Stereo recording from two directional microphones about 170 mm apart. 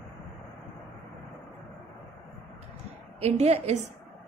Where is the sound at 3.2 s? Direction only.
40° right (ahead or behind).